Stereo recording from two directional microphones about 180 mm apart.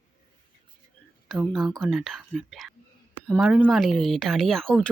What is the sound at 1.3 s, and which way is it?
Speech, centre (ahead or behind).